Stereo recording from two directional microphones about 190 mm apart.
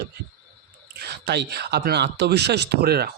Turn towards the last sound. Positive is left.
turn(degrees=-55)  # may be behind; listen again after turning